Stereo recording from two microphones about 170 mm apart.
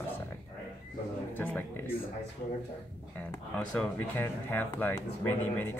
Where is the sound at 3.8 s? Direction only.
10° left (ahead or behind).